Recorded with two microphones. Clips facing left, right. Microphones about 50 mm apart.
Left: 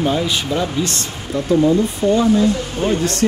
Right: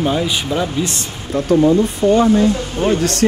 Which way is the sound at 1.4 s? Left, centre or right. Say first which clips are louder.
Right 2 dB; right.